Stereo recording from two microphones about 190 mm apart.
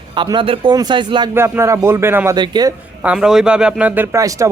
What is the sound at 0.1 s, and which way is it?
Speech, 25° right (ahead or behind).